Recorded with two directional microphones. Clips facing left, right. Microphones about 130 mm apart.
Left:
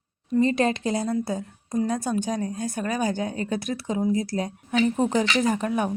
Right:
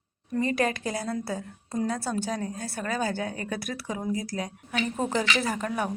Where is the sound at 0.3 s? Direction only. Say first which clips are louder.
Left 5 dB; 20° left (ahead or behind).